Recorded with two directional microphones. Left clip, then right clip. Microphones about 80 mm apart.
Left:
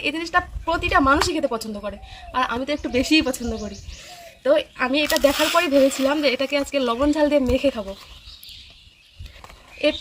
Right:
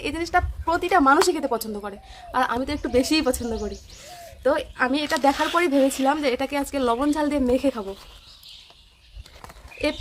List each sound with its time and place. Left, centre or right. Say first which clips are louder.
0.0 s speech: left 1 dB; right
4.4 s speech: left 2 dB; right